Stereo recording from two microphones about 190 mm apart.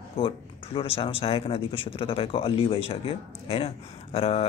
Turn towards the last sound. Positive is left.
turn(degrees=30)  # may be behind; listen again after turning